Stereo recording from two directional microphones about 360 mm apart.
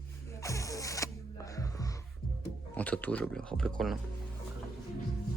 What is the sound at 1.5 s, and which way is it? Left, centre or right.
Music, centre.